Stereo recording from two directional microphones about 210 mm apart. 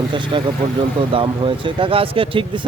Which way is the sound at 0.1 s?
20° right (ahead or behind).